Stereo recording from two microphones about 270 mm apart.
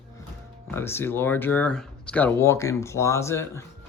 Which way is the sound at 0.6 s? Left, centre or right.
Centre.